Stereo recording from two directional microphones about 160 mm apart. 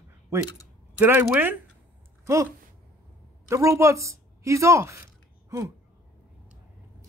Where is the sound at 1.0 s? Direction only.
15° right (ahead or behind).